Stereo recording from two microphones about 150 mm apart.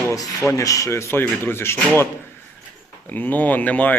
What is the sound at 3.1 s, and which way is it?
Speech, 10° left (ahead or behind).